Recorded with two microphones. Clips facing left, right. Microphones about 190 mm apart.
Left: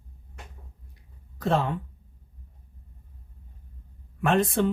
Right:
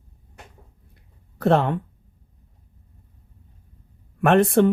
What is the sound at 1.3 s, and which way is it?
Speech, 65° right (ahead or behind).